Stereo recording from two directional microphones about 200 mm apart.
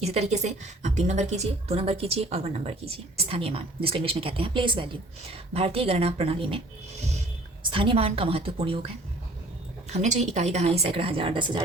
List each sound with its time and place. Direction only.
0.0 s a woman's voice: 30° right (ahead or behind)
7.6 s a woman's voice: 25° right (ahead or behind)
9.9 s a woman's voice: 35° right (ahead or behind)